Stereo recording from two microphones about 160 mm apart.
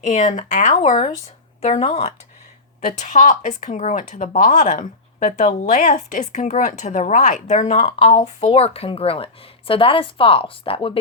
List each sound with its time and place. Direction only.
0.0 s speech: 50° left (ahead or behind)
1.6 s speech: 40° left (ahead or behind)